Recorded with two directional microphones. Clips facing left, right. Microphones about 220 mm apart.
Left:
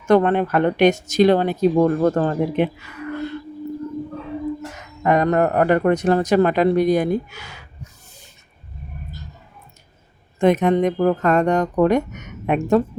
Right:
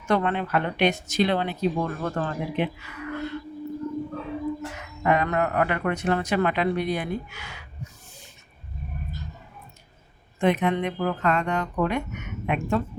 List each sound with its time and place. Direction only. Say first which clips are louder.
0.1 s speech: left 8 dB; 45° left (ahead or behind)
5.0 s speech: left 6 dB; 40° left (ahead or behind)
10.4 s speech: left 7 dB; 40° left (ahead or behind)